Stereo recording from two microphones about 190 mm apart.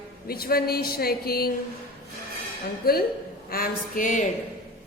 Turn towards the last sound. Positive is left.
turn(degrees=45)  # may be behind; listen again after turning